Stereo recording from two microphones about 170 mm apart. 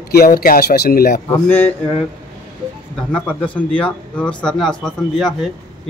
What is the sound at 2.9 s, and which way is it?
Speech, 5° left (ahead or behind).